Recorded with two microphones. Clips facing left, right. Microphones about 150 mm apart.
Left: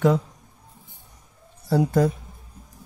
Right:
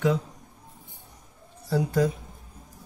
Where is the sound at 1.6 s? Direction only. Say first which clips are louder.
Left 4 dB; 50° left (ahead or behind).